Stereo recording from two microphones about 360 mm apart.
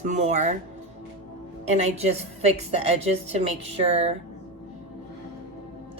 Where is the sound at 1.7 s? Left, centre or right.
Centre.